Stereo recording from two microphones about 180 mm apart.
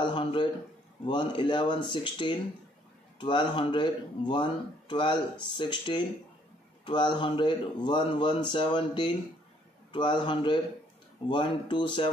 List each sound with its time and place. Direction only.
0.0 s a man's voice: 25° left (ahead or behind)